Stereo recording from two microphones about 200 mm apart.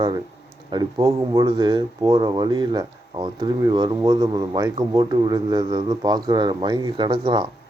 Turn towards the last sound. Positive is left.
turn(degrees=-25)  # may be behind; listen again after turning